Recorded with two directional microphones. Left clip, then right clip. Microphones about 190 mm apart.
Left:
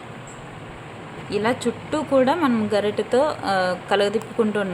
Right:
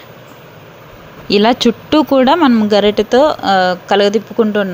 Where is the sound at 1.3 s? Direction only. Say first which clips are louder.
Right 12 dB; 40° right (ahead or behind).